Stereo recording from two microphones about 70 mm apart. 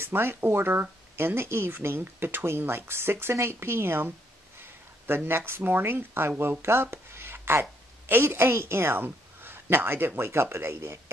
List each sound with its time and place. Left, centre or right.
0.0 s speech: right
6.6 s a sound: right
8.1 s speech: right